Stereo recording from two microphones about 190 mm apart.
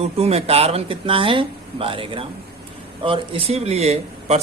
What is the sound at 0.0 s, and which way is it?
Speech, 35° right (ahead or behind).